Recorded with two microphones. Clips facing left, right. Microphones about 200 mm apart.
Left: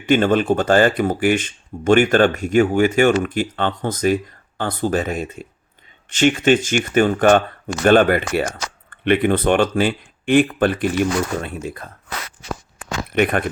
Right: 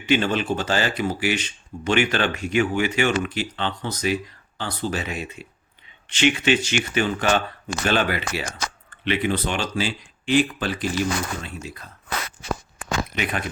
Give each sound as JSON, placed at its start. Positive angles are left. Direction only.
{"t": 0.0, "sound": "speech", "side_deg": 50}
{"t": 13.1, "sound": "speech", "side_deg": 55}